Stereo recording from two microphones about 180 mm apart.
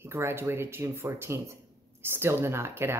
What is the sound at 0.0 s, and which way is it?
Speech, 15° right (ahead or behind).